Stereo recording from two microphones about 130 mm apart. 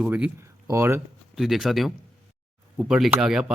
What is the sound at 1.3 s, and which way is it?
Speech, centre (ahead or behind).